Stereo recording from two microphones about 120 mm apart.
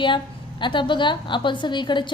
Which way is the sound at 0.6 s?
40° left (ahead or behind).